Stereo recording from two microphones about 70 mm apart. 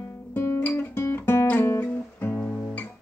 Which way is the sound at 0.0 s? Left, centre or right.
Left.